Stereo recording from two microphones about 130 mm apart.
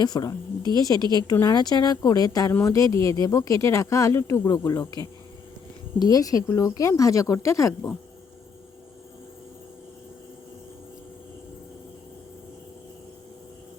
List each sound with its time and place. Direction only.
0.0 s a woman's voice: 30° left (ahead or behind)
6.0 s speech: 30° left (ahead or behind)